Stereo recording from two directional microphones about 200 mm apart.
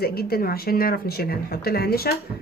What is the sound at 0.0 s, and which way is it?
Speech, 50° left (ahead or behind).